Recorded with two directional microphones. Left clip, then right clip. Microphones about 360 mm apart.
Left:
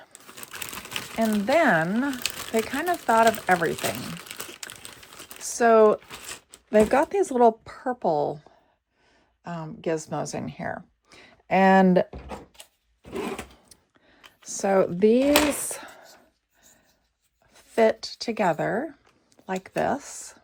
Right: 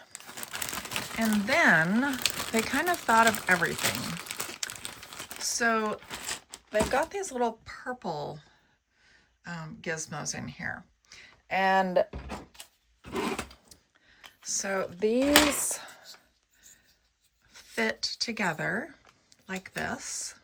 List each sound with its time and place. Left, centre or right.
0.1 s crumpling: centre
5.4 s a sound: centre
6.7 s speech: centre
12.3 s drawer open or close: centre
14.2 s a sound: centre
17.5 s speech: centre